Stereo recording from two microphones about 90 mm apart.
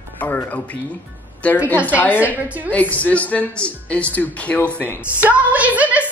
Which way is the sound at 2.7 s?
15° left (ahead or behind).